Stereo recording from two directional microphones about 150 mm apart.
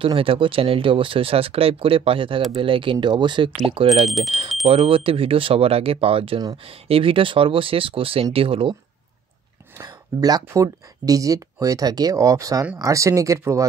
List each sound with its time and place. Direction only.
0.0 s speech: 35° right (ahead or behind)
9.8 s speech: 25° right (ahead or behind)